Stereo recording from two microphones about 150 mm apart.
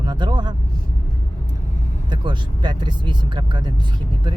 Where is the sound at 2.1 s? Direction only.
30° right (ahead or behind).